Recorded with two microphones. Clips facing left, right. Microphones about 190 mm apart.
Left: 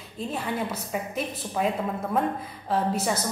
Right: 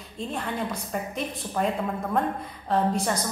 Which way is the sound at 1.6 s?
5° left (ahead or behind).